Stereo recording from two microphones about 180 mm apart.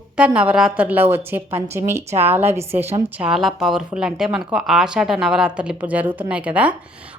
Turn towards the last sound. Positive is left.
turn(degrees=-10)  # may be behind; listen again after turning